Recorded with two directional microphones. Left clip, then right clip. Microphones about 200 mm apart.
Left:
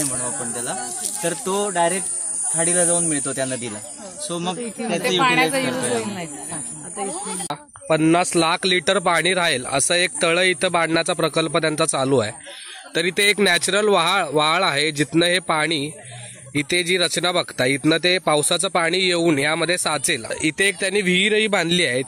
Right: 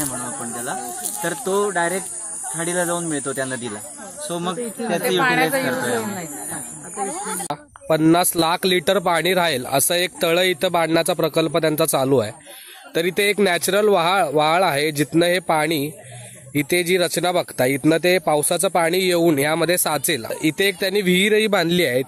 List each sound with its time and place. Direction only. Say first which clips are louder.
1.2 s speech: right 2 dB; 50° left (ahead or behind)
4.3 s speech: right 1 dB; 15° left (ahead or behind)
7.9 s speech: right 1 dB; 15° right (ahead or behind)
8.5 s speech: even; 5° right (ahead or behind)
20.2 s speech: even; 5° left (ahead or behind)